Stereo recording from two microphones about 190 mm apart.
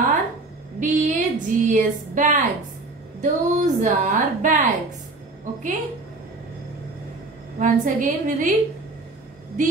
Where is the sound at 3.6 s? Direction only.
40° right (ahead or behind).